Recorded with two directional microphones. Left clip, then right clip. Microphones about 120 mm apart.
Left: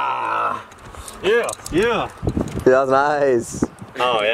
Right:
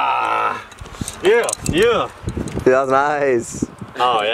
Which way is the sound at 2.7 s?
Centre (ahead or behind).